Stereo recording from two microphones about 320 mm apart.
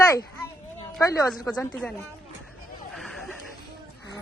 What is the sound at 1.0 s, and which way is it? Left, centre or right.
Speech, centre.